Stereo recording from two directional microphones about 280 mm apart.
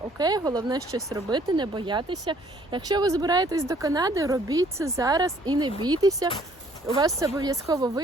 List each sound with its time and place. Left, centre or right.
0.2 s speech: centre